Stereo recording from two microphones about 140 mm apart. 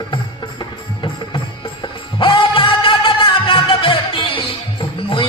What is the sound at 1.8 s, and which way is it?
Music, 35° left (ahead or behind).